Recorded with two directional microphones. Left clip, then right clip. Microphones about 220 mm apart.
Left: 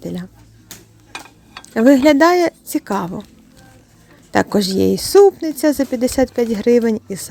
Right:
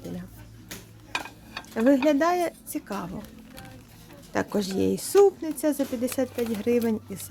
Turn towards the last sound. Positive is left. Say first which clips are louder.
# left 10 dB
turn(degrees=35)  # may be behind; listen again after turning